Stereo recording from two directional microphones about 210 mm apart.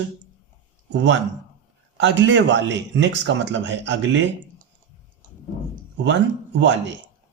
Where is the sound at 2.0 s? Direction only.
60° right (ahead or behind).